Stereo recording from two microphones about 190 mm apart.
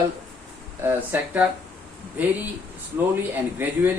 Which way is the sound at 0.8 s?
10° right (ahead or behind).